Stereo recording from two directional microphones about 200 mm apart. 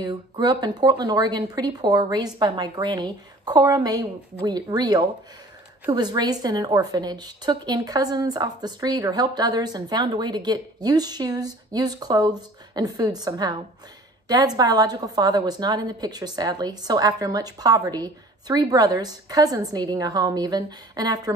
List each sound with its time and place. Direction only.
0.0 s a woman's voice: 20° right (ahead or behind)